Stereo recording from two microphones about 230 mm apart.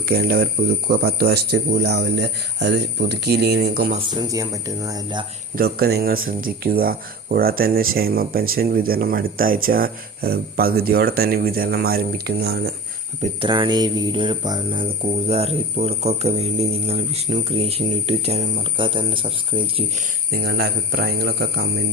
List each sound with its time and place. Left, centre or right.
0.0 s speech: right
3.9 s speech: centre
5.5 s speech: right
13.2 s speech: right
20.3 s speech: right